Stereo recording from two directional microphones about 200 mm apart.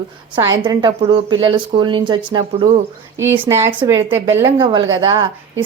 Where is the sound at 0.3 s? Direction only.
25° right (ahead or behind).